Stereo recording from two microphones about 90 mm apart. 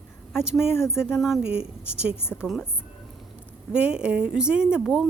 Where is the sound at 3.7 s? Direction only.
10° right (ahead or behind).